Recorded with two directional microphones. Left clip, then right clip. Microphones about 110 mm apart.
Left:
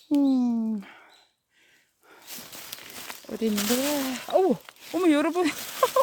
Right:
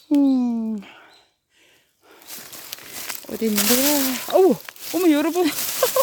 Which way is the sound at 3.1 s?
20° right (ahead or behind).